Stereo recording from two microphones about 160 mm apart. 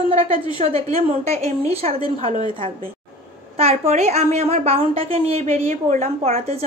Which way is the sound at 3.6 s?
45° right (ahead or behind).